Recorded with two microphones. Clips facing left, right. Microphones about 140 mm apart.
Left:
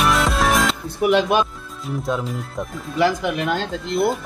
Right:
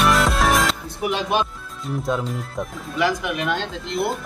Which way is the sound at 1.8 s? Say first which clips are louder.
Even; centre (ahead or behind).